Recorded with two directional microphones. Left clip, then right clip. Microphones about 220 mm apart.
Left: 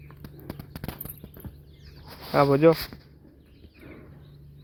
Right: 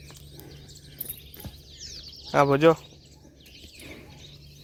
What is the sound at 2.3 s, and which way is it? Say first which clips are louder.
Speech: even; 5° right (ahead or behind).